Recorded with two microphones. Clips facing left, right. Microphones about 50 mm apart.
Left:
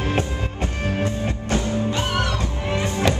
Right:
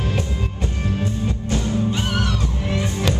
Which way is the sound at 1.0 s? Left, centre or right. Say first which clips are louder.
Even; left.